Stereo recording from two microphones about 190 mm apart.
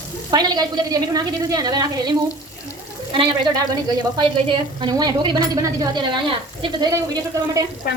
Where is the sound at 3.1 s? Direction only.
25° right (ahead or behind).